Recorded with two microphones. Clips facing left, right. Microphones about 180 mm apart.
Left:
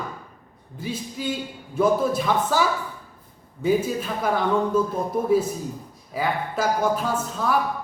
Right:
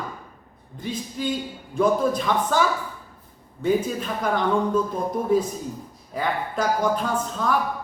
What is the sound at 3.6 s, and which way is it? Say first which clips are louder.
Speech: left 1 dB; 5° left (ahead or behind).